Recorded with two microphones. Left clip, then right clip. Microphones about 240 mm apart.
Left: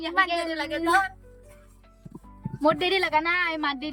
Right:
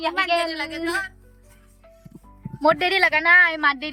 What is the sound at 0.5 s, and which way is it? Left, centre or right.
Speech, left.